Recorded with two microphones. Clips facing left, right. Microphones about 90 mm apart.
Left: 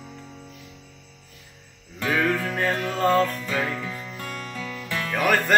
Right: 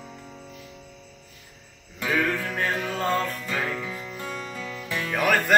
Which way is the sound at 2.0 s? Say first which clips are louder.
Left 2 dB; centre (ahead or behind).